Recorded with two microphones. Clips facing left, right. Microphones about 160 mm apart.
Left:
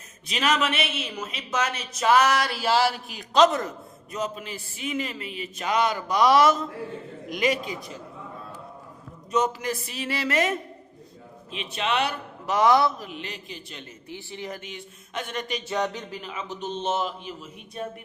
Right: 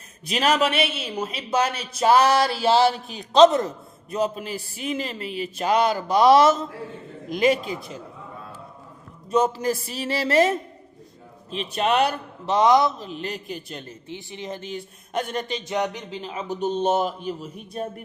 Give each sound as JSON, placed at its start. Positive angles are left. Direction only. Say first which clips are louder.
{"t": 0.3, "sound": "speech", "louder": "right 4 dB", "side_deg": -35}
{"t": 4.1, "sound": "speech", "louder": "right 6 dB", "side_deg": -35}
{"t": 9.3, "sound": "speech", "louder": "right 4 dB", "side_deg": -30}
{"t": 11.5, "sound": "a man's voice", "louder": "right 5 dB", "side_deg": -40}
{"t": 12.5, "sound": "music", "louder": "right 2 dB", "side_deg": -20}
{"t": 13.1, "sound": "a man's voice", "louder": "right 6 dB", "side_deg": -40}
{"t": 14.1, "sound": "music", "louder": "right 2 dB", "side_deg": -20}
{"t": 14.6, "sound": "speech", "louder": "right 7 dB", "side_deg": -40}
{"t": 15.6, "sound": "music", "louder": "right 2 dB", "side_deg": -15}
{"t": 16.8, "sound": "a man's voice", "louder": "right 4 dB", "side_deg": -45}